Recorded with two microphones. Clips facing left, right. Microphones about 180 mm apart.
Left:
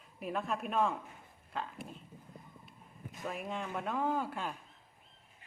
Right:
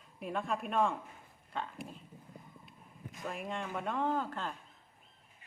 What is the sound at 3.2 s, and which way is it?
Speech, centre (ahead or behind).